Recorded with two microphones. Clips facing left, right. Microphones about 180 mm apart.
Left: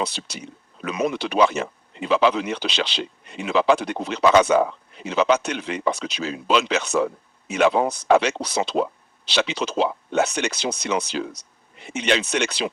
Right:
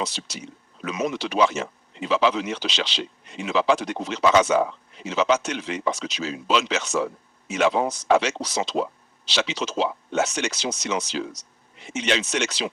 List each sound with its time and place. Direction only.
0.0 s speech: 60° left (ahead or behind)